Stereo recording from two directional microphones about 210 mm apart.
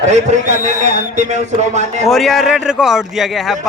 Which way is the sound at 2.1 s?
Centre (ahead or behind).